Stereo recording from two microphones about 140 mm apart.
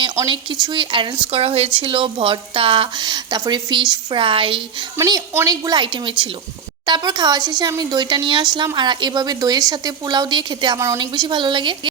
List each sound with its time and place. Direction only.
0.3 s speech: 30° right (ahead or behind)
4.9 s a woman's voice: 30° right (ahead or behind)